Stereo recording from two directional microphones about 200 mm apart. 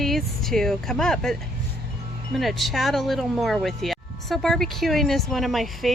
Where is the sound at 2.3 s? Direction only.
Centre (ahead or behind).